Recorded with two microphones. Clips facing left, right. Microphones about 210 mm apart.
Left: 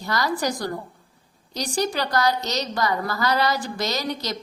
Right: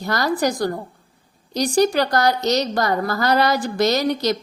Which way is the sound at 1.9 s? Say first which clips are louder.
Right 4 dB; 45° right (ahead or behind).